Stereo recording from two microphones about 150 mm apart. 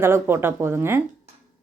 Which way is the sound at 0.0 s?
15° right (ahead or behind).